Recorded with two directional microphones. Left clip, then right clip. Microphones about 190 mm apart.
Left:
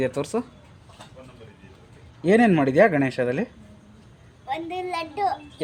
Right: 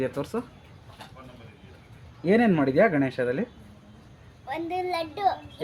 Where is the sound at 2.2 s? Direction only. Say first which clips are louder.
Left 4 dB; 50° left (ahead or behind).